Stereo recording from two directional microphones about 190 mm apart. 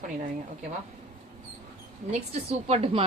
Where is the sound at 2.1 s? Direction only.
35° right (ahead or behind).